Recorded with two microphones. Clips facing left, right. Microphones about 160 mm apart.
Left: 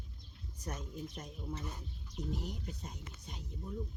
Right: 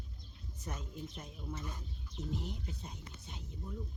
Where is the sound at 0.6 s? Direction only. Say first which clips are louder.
Left 2 dB; centre (ahead or behind).